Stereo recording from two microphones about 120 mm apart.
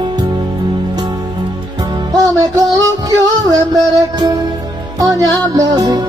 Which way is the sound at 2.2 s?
30° right (ahead or behind).